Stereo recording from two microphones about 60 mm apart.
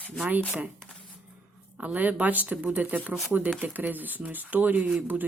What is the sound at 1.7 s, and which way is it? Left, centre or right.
Speech, right.